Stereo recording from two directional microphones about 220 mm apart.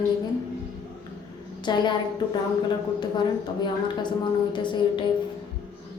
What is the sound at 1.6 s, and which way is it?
Speech, 20° left (ahead or behind).